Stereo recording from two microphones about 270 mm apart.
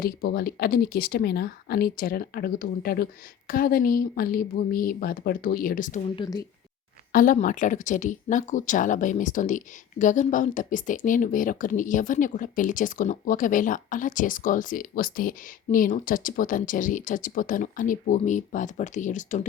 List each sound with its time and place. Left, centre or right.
0.0 s speech: left
6.1 s speech: centre
7.1 s speech: left